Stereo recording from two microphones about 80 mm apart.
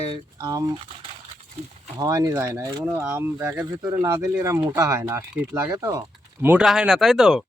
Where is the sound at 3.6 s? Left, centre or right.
Right.